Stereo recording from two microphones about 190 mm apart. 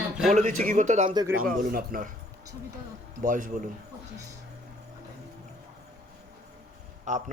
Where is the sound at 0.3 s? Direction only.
40° right (ahead or behind).